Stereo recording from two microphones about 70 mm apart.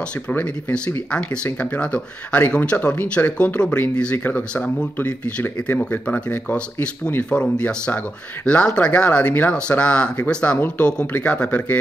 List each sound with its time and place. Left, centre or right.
0.3 s speech: left